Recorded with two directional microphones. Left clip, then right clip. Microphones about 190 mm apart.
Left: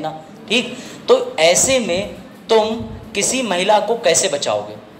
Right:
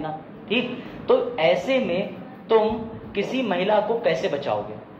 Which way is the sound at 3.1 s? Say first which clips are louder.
Left 6 dB; 70° left (ahead or behind).